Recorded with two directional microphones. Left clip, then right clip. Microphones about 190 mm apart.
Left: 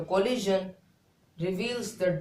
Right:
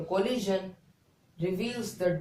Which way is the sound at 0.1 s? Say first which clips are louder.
Left 3 dB; 35° left (ahead or behind).